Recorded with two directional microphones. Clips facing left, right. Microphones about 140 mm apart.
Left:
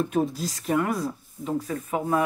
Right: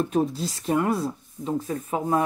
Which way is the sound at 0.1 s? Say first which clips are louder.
Right 1 dB; 30° right (ahead or behind).